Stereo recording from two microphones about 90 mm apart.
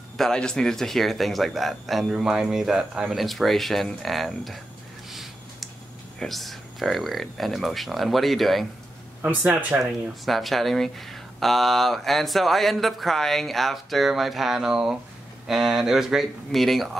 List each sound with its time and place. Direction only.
0.2 s speech: 10° left (ahead or behind)
5.1 s a sound: centre (ahead or behind)
6.1 s speech: centre (ahead or behind)
9.2 s speech: 20° right (ahead or behind)
10.2 s speech: centre (ahead or behind)